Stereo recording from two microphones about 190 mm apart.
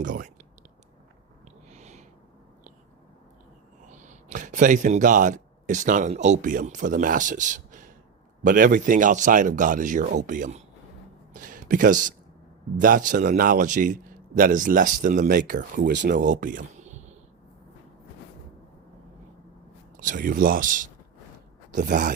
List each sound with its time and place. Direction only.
0.0 s a man's voice: 45° right (ahead or behind)
1.7 s a sound: 35° right (ahead or behind)
3.8 s a man's voice: 40° right (ahead or behind)
15.9 s speech: 65° right (ahead or behind)
16.2 s a sound: 45° right (ahead or behind)
20.0 s a man's voice: 45° right (ahead or behind)
21.7 s speech: 60° right (ahead or behind)